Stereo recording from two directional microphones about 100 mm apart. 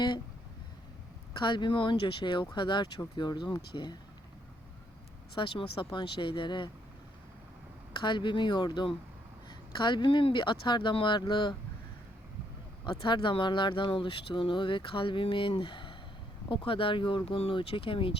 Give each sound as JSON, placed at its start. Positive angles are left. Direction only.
{"t": 1.4, "sound": "speech", "side_deg": 50}
{"t": 5.3, "sound": "speech", "side_deg": 55}
{"t": 7.9, "sound": "speech", "side_deg": 55}
{"t": 12.8, "sound": "speech", "side_deg": 55}
{"t": 17.2, "sound": "speech", "side_deg": 75}